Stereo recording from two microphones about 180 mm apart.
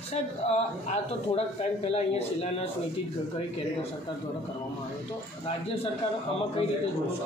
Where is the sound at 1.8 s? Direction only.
35° left (ahead or behind).